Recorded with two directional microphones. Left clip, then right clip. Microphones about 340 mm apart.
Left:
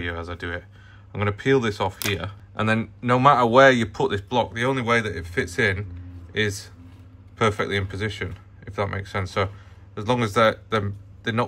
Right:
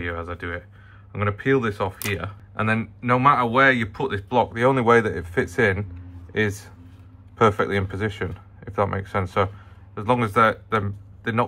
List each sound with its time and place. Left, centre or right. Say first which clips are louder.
0.0 s speech: right 1 dB; centre